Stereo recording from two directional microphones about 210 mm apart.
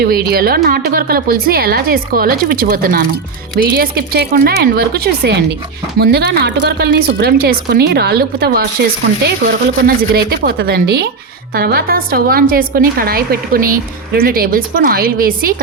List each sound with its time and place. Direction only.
0.0 s a woman's voice: 45° right (ahead or behind)